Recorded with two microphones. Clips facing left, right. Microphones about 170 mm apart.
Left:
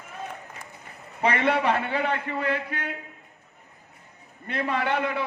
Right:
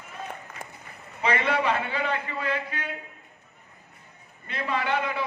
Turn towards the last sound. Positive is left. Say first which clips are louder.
# left 1 dB
turn(degrees=55)  # may be behind; listen again after turning